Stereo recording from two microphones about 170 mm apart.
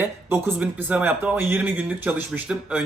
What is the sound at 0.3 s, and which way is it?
Speech, 10° right (ahead or behind).